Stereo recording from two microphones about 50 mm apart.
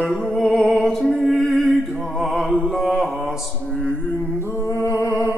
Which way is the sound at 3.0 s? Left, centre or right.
Centre.